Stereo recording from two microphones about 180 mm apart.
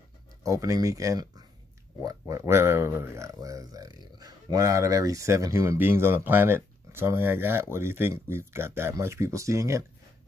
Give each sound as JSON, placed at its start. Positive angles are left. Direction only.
{"t": 0.4, "sound": "speech", "side_deg": -15}